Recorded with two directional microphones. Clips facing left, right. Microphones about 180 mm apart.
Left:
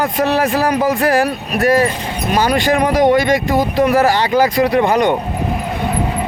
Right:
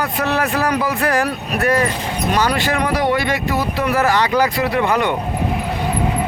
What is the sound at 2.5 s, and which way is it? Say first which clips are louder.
Speech: left 5 dB; 15° left (ahead or behind).